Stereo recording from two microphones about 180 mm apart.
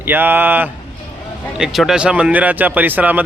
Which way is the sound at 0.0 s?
10° right (ahead or behind).